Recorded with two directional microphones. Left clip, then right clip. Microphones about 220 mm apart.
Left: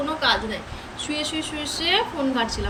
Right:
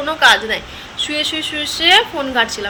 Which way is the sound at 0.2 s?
5° left (ahead or behind).